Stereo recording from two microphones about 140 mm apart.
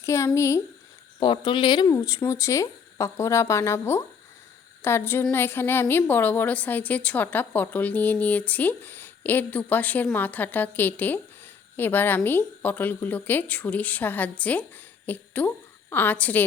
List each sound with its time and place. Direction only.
0.0 s speech: 20° left (ahead or behind)
1.2 s a woman's voice: 35° left (ahead or behind); by 16.4 s 10° left (ahead or behind)